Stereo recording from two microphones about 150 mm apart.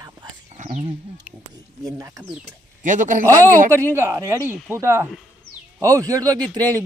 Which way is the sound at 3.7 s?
15° right (ahead or behind).